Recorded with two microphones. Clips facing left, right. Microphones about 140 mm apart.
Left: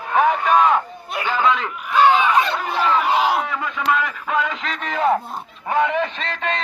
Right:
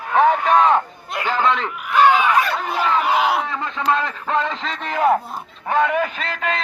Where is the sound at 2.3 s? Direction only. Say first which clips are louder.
Even; 25° left (ahead or behind).